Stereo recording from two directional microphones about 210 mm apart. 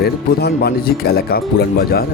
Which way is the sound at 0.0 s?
50° left (ahead or behind).